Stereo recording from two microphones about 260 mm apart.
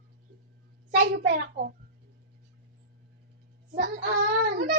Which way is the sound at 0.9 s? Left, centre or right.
Right.